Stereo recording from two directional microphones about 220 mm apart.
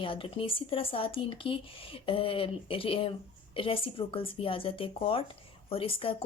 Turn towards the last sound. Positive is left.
turn(degrees=25)  # may be behind; listen again after turning